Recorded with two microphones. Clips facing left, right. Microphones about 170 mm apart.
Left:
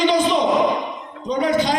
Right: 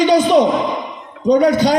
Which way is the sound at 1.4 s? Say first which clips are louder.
Right 3 dB; 40° right (ahead or behind).